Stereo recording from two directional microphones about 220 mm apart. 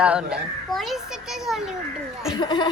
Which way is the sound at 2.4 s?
20° left (ahead or behind).